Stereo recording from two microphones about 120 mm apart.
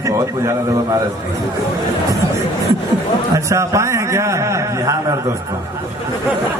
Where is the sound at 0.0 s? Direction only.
25° right (ahead or behind).